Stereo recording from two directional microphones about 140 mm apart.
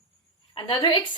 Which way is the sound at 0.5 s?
25° left (ahead or behind).